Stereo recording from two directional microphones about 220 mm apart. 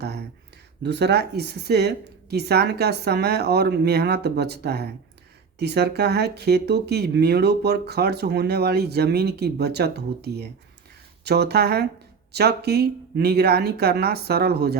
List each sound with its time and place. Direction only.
0.8 s speech: 50° right (ahead or behind)